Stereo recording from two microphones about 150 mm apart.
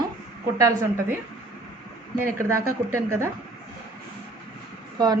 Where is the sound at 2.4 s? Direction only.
20° right (ahead or behind).